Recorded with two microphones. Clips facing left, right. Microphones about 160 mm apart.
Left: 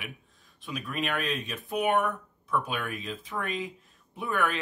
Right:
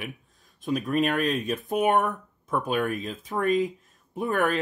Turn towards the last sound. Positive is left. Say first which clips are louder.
# right 5 dB
turn(degrees=-45)  # may be behind; listen again after turning